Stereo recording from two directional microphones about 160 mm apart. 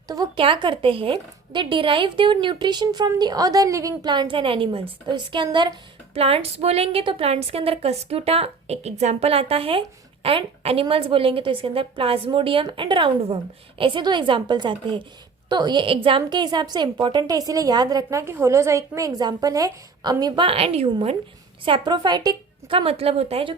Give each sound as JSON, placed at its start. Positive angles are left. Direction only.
{"t": 0.1, "sound": "a woman's voice", "side_deg": -30}
{"t": 22.7, "sound": "a woman's voice", "side_deg": -35}